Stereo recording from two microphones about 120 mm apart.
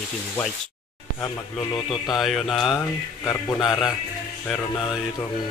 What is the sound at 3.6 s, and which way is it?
Speech, 5° left (ahead or behind).